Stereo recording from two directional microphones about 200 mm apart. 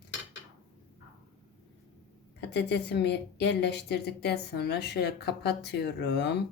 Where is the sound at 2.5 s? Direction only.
55° left (ahead or behind).